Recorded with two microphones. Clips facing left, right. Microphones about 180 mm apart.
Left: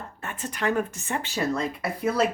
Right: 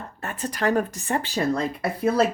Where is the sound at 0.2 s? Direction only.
40° right (ahead or behind).